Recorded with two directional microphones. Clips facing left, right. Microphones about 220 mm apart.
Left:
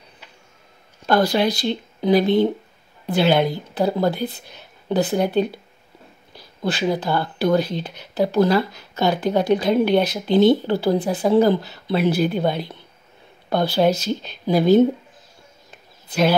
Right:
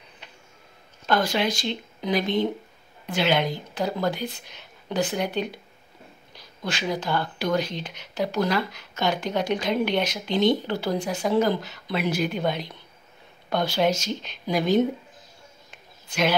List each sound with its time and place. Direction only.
1.0 s speech: 40° left (ahead or behind)
6.7 s speech: 35° left (ahead or behind)
15.7 s a sound: 35° left (ahead or behind)